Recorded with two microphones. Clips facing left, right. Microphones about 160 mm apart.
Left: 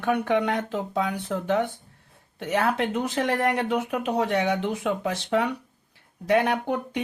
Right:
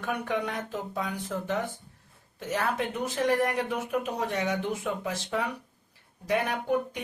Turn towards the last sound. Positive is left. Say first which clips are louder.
# left 2 dB
turn(degrees=80)